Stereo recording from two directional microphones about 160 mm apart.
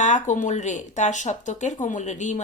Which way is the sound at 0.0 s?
50° left (ahead or behind).